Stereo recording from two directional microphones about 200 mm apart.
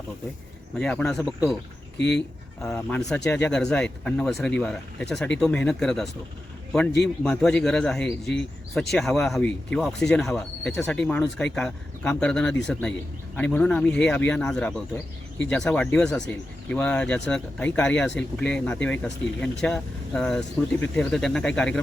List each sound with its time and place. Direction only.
0.8 s speech: 5° left (ahead or behind)
2.0 s speech: 60° left (ahead or behind)
2.6 s speech: 5° left (ahead or behind)